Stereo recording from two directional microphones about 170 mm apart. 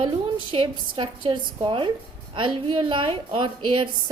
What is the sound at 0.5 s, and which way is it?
A woman's voice, 30° right (ahead or behind).